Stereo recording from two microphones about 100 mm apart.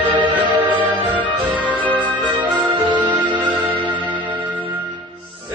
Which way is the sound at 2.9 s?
15° right (ahead or behind).